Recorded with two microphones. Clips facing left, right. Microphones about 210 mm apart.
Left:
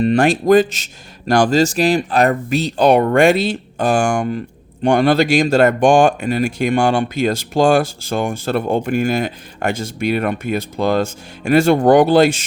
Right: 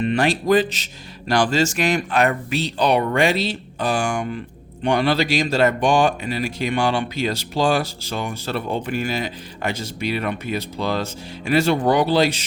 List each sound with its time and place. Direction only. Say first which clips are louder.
0.0 s speech: left 6 dB; 45° left (ahead or behind)